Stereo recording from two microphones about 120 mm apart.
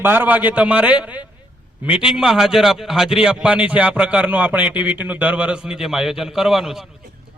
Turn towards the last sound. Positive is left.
turn(degrees=-5)  # may be behind; listen again after turning